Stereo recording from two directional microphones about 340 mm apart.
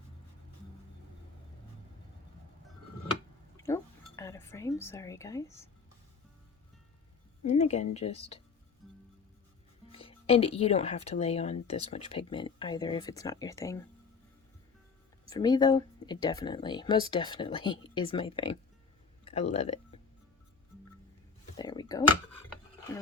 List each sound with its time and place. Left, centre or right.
3.6 s chink: centre
7.4 s speech: centre
8.8 s music: centre
9.9 s speech: centre
15.3 s speech: centre
19.2 s a sound: centre
21.5 s a sound: centre